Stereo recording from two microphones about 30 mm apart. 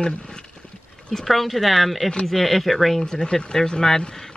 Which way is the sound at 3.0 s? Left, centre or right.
Left.